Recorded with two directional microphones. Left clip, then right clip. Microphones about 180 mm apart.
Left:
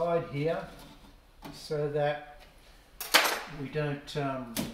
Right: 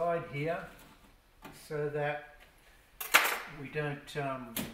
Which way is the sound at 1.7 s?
10° left (ahead or behind).